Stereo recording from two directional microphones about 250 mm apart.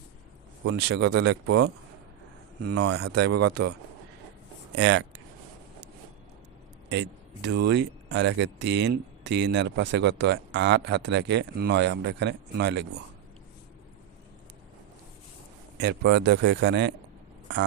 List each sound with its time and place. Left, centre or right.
0.6 s speech: right
2.9 s speech: right
6.8 s speech: right
15.8 s speech: right